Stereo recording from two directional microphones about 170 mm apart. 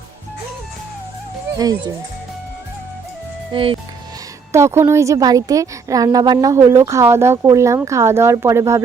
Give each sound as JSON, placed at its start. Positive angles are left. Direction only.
{"t": 1.5, "sound": "speech", "side_deg": -20}
{"t": 3.5, "sound": "speech", "side_deg": -30}
{"t": 4.5, "sound": "a woman's voice", "side_deg": -15}